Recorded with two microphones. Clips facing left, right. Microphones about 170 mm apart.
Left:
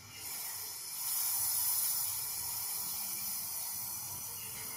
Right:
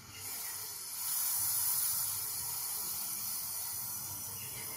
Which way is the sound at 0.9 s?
15° left (ahead or behind).